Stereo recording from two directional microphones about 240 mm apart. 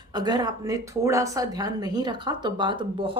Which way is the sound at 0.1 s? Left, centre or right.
Centre.